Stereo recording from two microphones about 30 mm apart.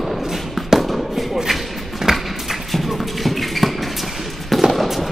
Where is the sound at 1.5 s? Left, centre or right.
Centre.